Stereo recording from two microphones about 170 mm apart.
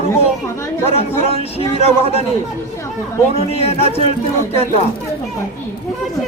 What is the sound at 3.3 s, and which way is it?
Speech, 35° left (ahead or behind).